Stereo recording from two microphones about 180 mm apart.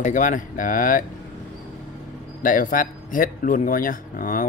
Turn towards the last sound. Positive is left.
turn(degrees=50)  # may be behind; listen again after turning